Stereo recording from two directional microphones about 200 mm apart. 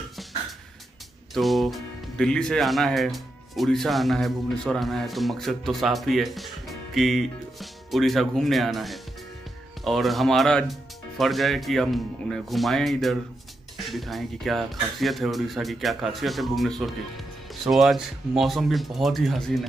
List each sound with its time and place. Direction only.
1.3 s speech: centre (ahead or behind)